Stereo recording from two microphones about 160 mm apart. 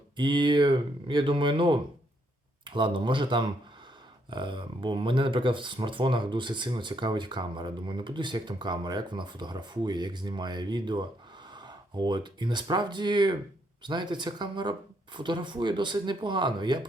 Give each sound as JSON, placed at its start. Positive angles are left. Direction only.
{"t": 0.2, "sound": "speech", "side_deg": -30}